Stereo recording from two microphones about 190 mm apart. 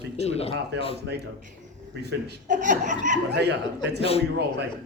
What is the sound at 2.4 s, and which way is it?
Speech, 40° right (ahead or behind).